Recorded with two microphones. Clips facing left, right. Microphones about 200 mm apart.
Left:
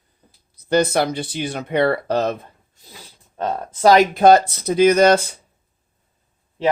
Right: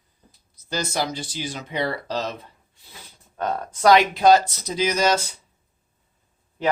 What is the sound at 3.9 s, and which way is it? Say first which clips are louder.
Speech: left 3 dB; 45° left (ahead or behind).